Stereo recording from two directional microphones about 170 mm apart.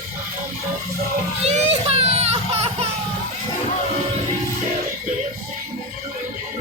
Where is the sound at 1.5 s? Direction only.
40° right (ahead or behind).